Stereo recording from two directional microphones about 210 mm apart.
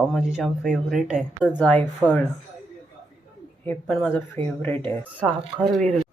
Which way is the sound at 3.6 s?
5° left (ahead or behind).